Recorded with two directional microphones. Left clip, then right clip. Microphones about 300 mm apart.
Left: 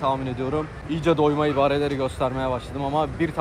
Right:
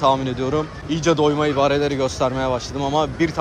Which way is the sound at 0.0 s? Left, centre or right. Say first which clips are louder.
Right 6 dB; centre.